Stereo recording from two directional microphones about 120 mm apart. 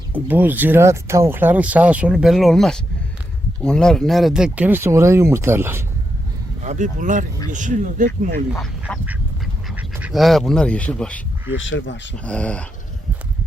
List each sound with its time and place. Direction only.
0.1 s speech: 15° right (ahead or behind)
6.6 s speech: 80° right
8.9 s speech: 10° left (ahead or behind)
9.7 s duck: 10° right (ahead or behind)
10.2 s speech: centre (ahead or behind)
12.2 s speech: 10° left (ahead or behind)